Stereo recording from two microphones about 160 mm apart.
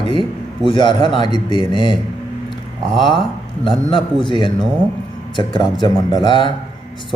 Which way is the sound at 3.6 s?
30° left (ahead or behind).